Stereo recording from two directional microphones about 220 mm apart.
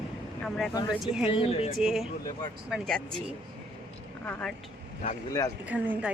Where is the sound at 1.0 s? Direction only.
Centre (ahead or behind).